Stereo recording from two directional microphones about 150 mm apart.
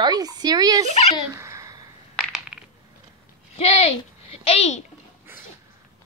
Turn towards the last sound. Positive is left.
turn(degrees=45)  # may be behind; listen again after turning